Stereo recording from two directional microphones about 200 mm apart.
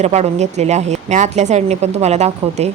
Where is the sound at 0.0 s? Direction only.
35° right (ahead or behind).